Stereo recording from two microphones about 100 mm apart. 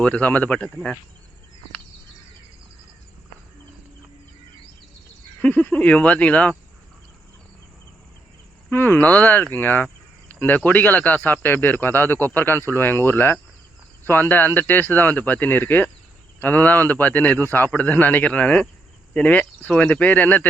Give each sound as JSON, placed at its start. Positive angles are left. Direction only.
{"t": 0.0, "sound": "speech", "side_deg": 15}
{"t": 0.7, "sound": "speech", "side_deg": 0}
{"t": 5.4, "sound": "speech", "side_deg": 15}
{"t": 8.7, "sound": "speech", "side_deg": 20}